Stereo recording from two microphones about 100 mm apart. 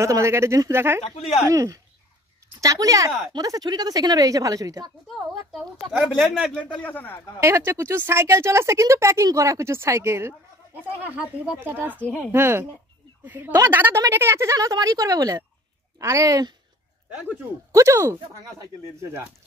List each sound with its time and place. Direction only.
0.0 s a woman's voice: 30° right (ahead or behind)
5.5 s speech: 5° right (ahead or behind)
6.6 s speech: 15° left (ahead or behind)
7.4 s a woman's voice: 30° right (ahead or behind)
17.7 s speech: 30° right (ahead or behind)